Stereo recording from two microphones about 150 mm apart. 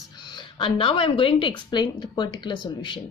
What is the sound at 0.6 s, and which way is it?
A woman's voice, 35° left (ahead or behind).